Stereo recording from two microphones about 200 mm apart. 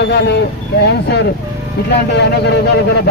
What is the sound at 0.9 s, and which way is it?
Speech, 55° left (ahead or behind).